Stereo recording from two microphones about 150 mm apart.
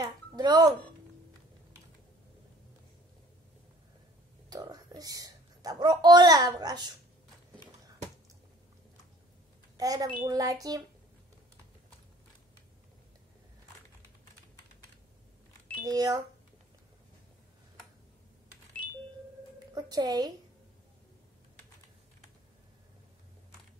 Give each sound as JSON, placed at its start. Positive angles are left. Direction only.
{"t": 0.0, "sound": "speech", "side_deg": -25}
{"t": 4.5, "sound": "speech", "side_deg": -25}
{"t": 9.8, "sound": "a child's voice", "side_deg": -25}
{"t": 15.8, "sound": "a child's voice", "side_deg": -25}
{"t": 19.7, "sound": "a child's voice", "side_deg": -25}